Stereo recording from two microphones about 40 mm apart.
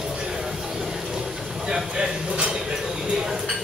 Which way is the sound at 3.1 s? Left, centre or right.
Centre.